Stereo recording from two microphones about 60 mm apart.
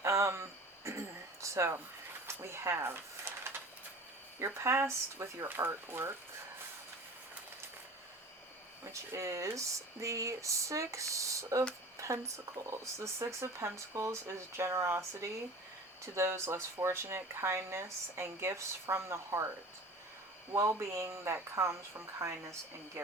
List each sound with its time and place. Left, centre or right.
0.0 s a sound: right
4.4 s speech: right
5.5 s speech: right
8.8 s speech: right
11.9 s a sound: right
12.7 s speech: right
20.5 s speech: right